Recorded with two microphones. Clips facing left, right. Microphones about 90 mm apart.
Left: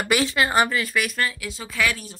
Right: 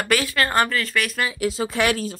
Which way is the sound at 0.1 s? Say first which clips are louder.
Left 1 dB; 20° left (ahead or behind).